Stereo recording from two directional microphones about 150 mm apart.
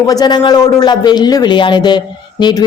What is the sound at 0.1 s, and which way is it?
A woman's voice, 25° left (ahead or behind).